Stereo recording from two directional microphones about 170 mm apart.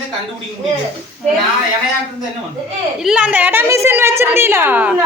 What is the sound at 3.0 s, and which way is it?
A woman's voice, 5° right (ahead or behind).